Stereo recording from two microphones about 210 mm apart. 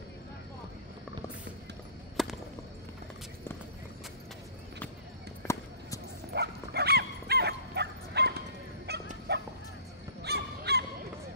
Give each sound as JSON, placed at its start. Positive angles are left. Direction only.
{"t": 2.2, "sound": "whip", "side_deg": 0}
{"t": 6.3, "sound": "bow-wow", "side_deg": -50}
{"t": 10.2, "sound": "honk", "side_deg": -50}